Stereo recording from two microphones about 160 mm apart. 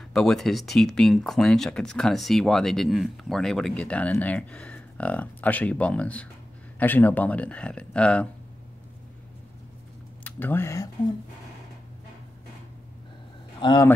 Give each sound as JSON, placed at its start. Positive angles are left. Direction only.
{"t": 0.1, "sound": "speech", "side_deg": 5}
{"t": 10.2, "sound": "speech", "side_deg": 10}
{"t": 13.6, "sound": "speech", "side_deg": 30}